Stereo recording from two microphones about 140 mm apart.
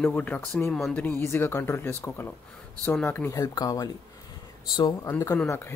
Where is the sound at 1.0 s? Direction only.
15° left (ahead or behind).